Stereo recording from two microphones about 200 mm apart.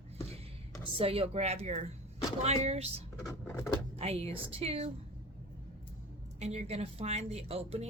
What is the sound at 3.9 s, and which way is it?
Speech, 30° right (ahead or behind).